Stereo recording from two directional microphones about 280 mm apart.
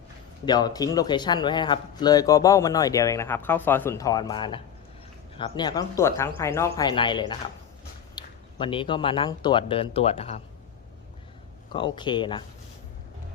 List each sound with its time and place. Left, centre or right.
0.4 s a man's voice: centre
11.7 s a man's voice: centre